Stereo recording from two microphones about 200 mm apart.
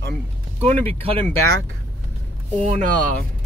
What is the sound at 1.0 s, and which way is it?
Speech, 30° right (ahead or behind).